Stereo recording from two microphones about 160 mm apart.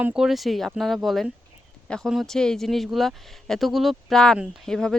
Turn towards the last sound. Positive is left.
turn(degrees=5)  # may be behind; listen again after turning